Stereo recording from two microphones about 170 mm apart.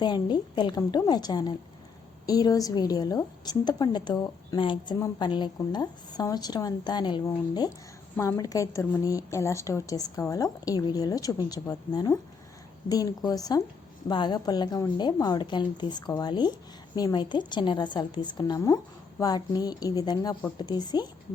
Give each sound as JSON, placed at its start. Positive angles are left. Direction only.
{"t": 0.0, "sound": "a woman's voice", "side_deg": 25}